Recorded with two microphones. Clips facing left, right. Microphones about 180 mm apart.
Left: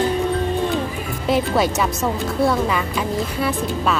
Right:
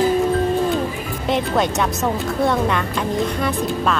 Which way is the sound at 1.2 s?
5° left (ahead or behind).